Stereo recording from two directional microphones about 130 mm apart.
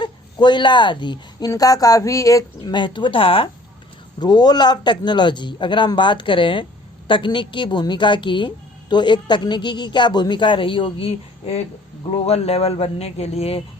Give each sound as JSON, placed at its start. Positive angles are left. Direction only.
{"t": 0.0, "sound": "a woman's voice", "side_deg": 35}
{"t": 2.7, "sound": "a woman's voice", "side_deg": 40}
{"t": 4.2, "sound": "a woman's voice", "side_deg": 30}